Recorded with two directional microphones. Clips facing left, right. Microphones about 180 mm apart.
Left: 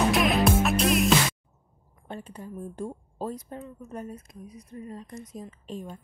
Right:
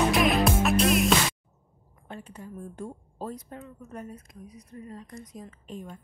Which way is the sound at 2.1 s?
30° left (ahead or behind).